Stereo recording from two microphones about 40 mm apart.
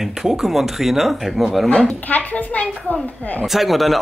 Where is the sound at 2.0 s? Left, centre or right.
Left.